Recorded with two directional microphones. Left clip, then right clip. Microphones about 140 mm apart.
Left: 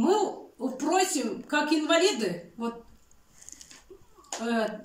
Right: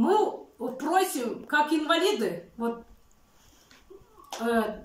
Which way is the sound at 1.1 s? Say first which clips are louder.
Even; 15° left (ahead or behind).